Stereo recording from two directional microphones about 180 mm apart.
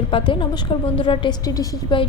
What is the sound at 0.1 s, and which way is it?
A woman's voice, 25° left (ahead or behind).